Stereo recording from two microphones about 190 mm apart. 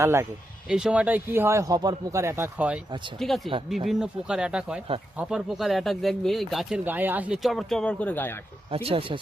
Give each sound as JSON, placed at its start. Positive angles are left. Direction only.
{"t": 0.0, "sound": "speech", "side_deg": -15}
{"t": 8.7, "sound": "speech", "side_deg": -30}